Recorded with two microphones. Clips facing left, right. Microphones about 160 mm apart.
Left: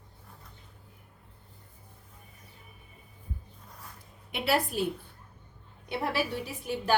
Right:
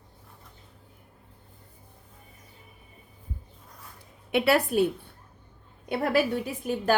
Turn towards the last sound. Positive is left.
turn(degrees=-50)  # may be behind; listen again after turning